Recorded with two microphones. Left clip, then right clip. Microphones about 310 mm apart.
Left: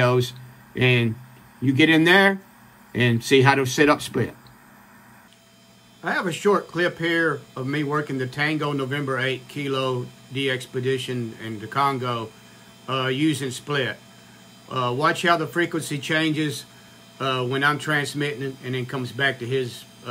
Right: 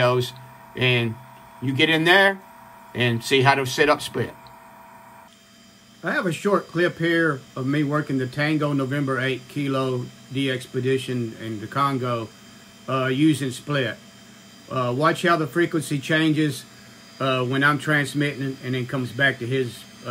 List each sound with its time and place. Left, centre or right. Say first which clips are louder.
0.0 s a sound: even; centre
1.6 s speech: left 2 dB; centre
6.0 s speech: left 2 dB; centre